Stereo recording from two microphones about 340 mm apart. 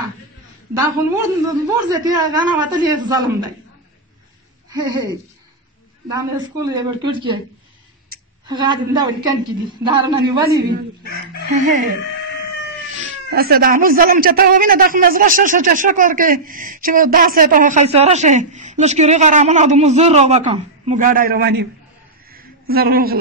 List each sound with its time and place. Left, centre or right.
0.7 s a man's voice: centre
4.6 s a man's voice: centre
8.5 s a man's voice: centre
11.6 s a man's voice: right
13.3 s a man's voice: right
22.3 s a sound: right